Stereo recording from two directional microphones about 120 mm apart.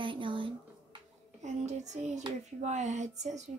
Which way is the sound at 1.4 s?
75° right (ahead or behind).